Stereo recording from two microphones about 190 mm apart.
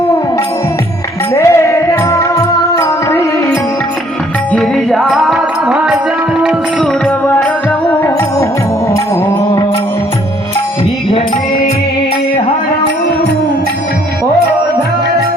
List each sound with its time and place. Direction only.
1.3 s music: 15° left (ahead or behind)
4.5 s music: centre (ahead or behind)